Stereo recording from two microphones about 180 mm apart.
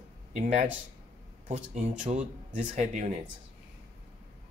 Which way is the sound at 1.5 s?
40° right (ahead or behind).